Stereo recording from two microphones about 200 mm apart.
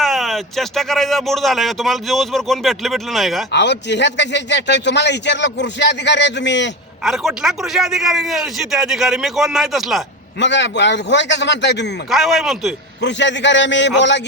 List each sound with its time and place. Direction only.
0.0 s a man's voice: centre (ahead or behind)
3.5 s a man's voice: 60° left (ahead or behind)
7.0 s a man's voice: centre (ahead or behind)
10.4 s a man's voice: 60° left (ahead or behind)
12.1 s a man's voice: centre (ahead or behind)
13.0 s a man's voice: 65° left (ahead or behind)